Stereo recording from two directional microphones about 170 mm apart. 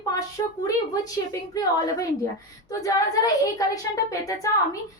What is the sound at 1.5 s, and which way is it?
Speech, 20° left (ahead or behind).